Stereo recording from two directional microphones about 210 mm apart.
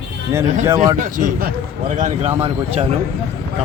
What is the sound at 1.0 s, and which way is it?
Speech, 40° right (ahead or behind).